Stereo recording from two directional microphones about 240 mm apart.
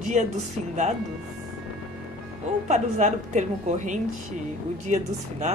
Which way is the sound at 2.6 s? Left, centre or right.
Right.